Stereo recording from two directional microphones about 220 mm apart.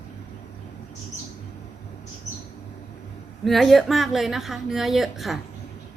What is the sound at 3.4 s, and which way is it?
A woman's voice, centre (ahead or behind).